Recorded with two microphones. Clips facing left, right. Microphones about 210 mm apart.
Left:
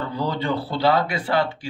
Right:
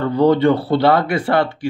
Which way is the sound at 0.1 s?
60° right (ahead or behind).